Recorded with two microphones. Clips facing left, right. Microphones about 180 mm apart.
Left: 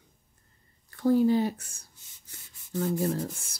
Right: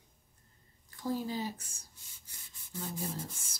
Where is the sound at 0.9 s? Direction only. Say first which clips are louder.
Left 13 dB; 65° left (ahead or behind).